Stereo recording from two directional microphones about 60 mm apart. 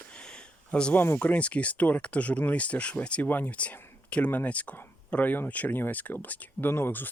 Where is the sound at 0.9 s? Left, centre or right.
Left.